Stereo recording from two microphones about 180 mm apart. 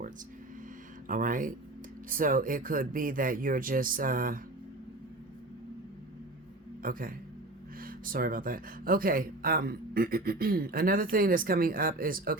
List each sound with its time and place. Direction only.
1.0 s speech: 50° right (ahead or behind)
6.8 s speech: 50° right (ahead or behind)